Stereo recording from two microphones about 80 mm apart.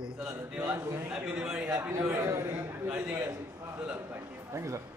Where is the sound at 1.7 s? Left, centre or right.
Right.